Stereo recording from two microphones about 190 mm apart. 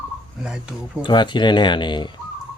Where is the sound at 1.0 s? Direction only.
25° left (ahead or behind).